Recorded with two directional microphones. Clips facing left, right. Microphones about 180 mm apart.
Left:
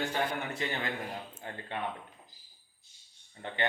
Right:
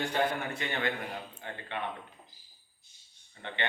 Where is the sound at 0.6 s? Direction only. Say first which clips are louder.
Left 1 dB; 30° left (ahead or behind).